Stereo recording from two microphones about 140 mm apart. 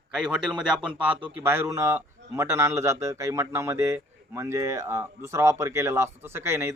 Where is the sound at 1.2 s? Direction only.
15° right (ahead or behind).